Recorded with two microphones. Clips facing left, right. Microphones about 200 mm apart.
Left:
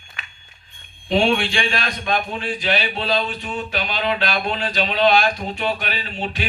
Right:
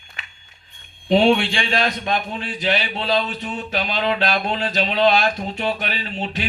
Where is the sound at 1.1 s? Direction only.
20° right (ahead or behind).